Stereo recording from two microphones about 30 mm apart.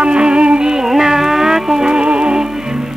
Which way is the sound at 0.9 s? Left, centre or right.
Centre.